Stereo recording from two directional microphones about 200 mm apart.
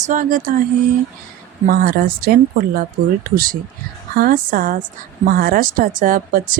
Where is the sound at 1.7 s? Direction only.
50° right (ahead or behind).